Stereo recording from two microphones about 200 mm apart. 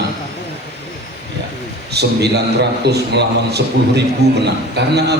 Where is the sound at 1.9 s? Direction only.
55° right (ahead or behind).